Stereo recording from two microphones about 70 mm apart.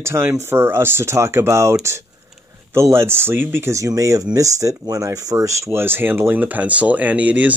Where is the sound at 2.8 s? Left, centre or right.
Right.